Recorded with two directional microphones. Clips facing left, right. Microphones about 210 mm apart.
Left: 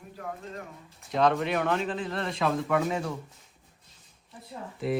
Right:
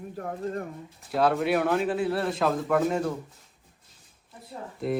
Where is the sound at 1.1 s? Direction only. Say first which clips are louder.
Right 2 dB; 5° right (ahead or behind).